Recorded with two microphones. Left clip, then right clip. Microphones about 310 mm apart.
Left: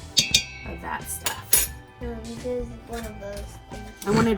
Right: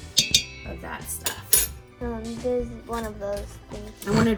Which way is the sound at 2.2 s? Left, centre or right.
Centre.